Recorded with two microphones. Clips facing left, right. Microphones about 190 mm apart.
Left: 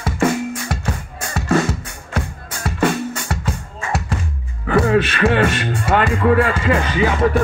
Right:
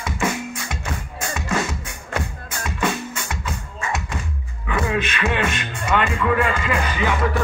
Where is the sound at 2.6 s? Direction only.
40° left (ahead or behind).